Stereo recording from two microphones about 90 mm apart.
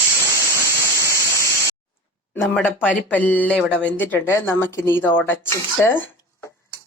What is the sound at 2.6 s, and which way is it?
Speech, 20° left (ahead or behind).